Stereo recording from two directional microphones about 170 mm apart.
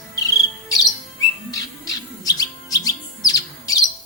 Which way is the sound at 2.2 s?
20° left (ahead or behind).